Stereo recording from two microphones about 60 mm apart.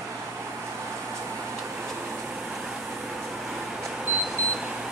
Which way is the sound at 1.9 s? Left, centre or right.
Centre.